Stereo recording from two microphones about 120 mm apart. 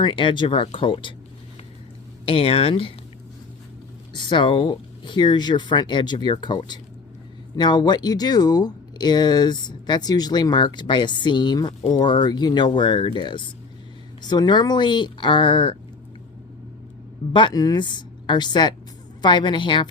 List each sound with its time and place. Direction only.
0.0 s speech: 45° left (ahead or behind)
2.2 s speech: 55° left (ahead or behind)
4.1 s speech: 40° left (ahead or behind)
17.3 s speech: 35° left (ahead or behind)